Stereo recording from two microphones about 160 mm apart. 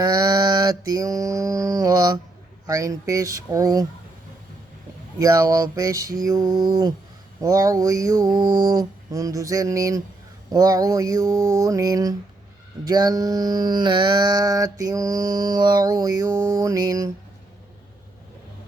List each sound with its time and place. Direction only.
0.0 s mantra: 25° right (ahead or behind)
5.2 s mantra: 20° right (ahead or behind)